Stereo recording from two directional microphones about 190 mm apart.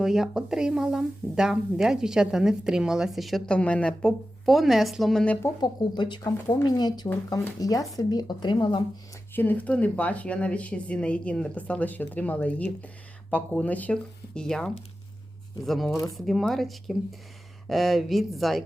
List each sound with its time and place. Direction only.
0.0 s speech: centre (ahead or behind)
5.5 s speech: 25° left (ahead or behind)
9.3 s speech: 10° left (ahead or behind)